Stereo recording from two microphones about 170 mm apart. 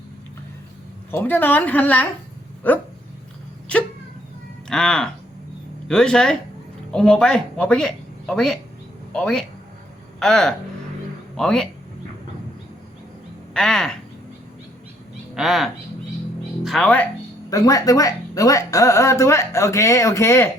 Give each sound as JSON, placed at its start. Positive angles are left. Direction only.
{"t": 1.1, "sound": "speech", "side_deg": 10}
{"t": 4.7, "sound": "speech", "side_deg": 5}
{"t": 13.5, "sound": "speech", "side_deg": 5}
{"t": 15.4, "sound": "speech", "side_deg": 0}
{"t": 17.5, "sound": "speech", "side_deg": 20}